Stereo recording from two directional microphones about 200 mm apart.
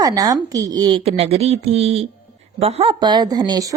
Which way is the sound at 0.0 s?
20° right (ahead or behind).